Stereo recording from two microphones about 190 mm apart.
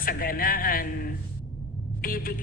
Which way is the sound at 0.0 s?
50° left (ahead or behind).